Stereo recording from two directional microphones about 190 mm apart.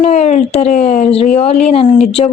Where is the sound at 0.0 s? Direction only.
40° left (ahead or behind).